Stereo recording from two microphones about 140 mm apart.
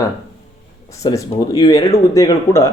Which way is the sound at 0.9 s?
25° left (ahead or behind).